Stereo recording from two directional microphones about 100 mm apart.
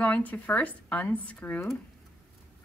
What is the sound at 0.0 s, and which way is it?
Speech, 15° left (ahead or behind).